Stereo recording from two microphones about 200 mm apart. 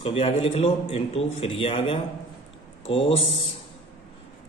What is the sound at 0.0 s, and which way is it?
A man's voice, 25° left (ahead or behind).